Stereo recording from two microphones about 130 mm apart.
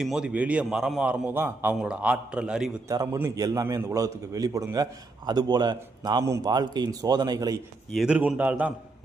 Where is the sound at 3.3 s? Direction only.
30° right (ahead or behind).